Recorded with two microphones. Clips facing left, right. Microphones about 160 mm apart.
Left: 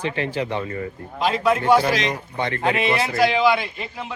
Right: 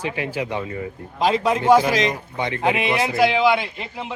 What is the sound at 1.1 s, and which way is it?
Speech, 35° right (ahead or behind).